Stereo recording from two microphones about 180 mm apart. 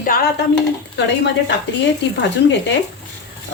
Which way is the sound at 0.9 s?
75° left (ahead or behind).